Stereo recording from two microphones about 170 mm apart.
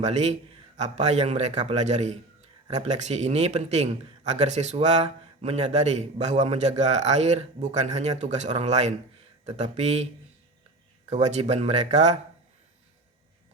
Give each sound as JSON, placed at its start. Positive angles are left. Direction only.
{"t": 0.0, "sound": "a man's voice", "side_deg": -40}
{"t": 11.1, "sound": "a man's voice", "side_deg": -40}